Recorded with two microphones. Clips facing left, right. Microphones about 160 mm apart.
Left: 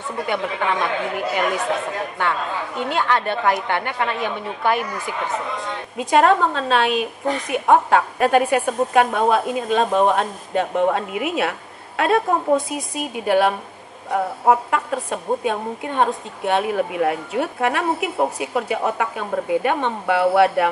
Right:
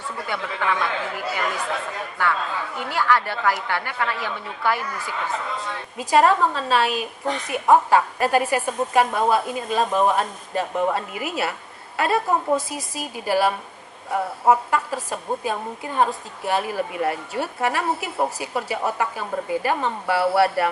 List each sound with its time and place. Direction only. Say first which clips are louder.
0.3 s speech: left 3 dB; 25° left (ahead or behind)
5.9 s a woman's voice: left 2 dB; centre (ahead or behind)